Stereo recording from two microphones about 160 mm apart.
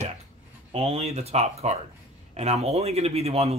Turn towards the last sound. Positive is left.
turn(degrees=-40)  # may be behind; listen again after turning